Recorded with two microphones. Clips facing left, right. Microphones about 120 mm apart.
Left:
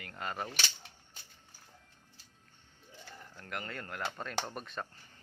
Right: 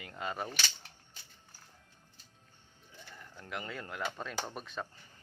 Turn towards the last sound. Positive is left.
turn(degrees=0)  # may be behind; listen again after turning